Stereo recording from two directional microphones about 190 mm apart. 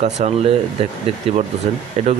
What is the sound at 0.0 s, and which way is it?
Speech, 35° right (ahead or behind).